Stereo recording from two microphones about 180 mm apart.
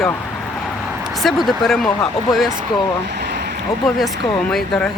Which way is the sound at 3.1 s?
65° right (ahead or behind).